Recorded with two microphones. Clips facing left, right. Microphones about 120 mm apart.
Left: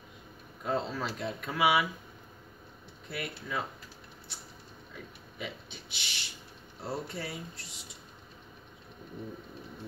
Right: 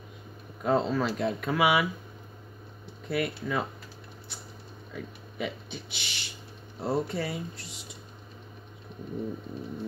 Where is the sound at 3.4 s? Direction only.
50° right (ahead or behind).